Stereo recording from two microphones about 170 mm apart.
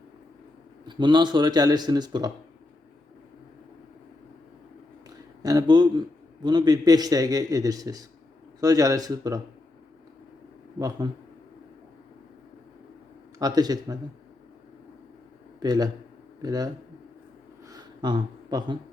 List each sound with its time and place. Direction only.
0.9 s a man's voice: 25° right (ahead or behind)
5.4 s a man's voice: 20° right (ahead or behind)
10.8 s a man's voice: 20° right (ahead or behind)
13.4 s a man's voice: 25° right (ahead or behind)
15.6 s a man's voice: 20° right (ahead or behind)
17.7 s a sound: 25° right (ahead or behind)